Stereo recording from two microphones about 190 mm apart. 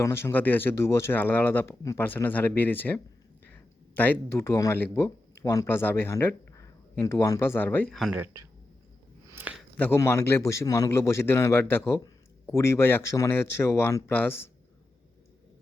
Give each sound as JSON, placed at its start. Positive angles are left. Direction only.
{"t": 0.0, "sound": "speech", "side_deg": 10}
{"t": 8.2, "sound": "speech", "side_deg": -15}
{"t": 9.3, "sound": "a sound", "side_deg": -10}
{"t": 9.7, "sound": "speech", "side_deg": 10}